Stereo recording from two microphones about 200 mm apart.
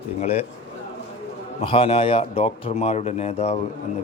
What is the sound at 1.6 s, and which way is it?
A man's voice, 25° left (ahead or behind).